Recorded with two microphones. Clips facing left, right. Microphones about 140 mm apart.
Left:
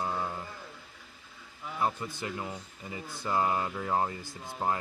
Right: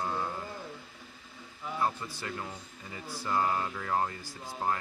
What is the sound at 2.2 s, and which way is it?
Speech, 20° left (ahead or behind).